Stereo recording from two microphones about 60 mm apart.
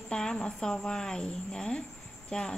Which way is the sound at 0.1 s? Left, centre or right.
Centre.